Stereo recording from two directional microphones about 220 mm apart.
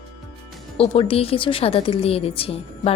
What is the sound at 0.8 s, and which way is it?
A woman's voice, 25° left (ahead or behind).